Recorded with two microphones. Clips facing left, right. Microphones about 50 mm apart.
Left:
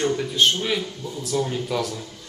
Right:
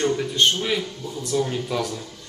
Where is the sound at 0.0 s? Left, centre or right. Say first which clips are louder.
Even; centre.